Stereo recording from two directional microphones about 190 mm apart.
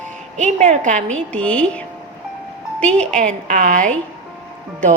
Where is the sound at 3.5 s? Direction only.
45° right (ahead or behind).